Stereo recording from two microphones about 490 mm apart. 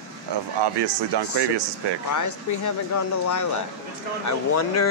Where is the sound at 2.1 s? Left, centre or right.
Left.